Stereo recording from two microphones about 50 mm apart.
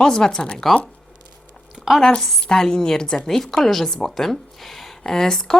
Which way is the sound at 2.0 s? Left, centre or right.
Centre.